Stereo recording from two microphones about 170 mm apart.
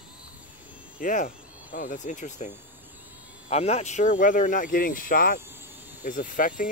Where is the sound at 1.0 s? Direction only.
50° left (ahead or behind).